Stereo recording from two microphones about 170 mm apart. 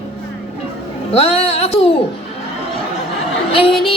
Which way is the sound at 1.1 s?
35° left (ahead or behind).